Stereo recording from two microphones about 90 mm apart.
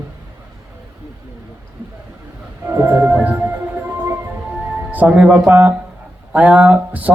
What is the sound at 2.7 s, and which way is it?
Music, 25° right (ahead or behind).